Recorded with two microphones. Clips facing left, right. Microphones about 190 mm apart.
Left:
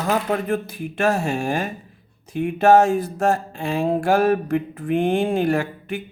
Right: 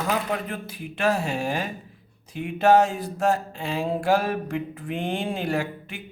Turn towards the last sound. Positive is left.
turn(degrees=50)  # may be behind; listen again after turning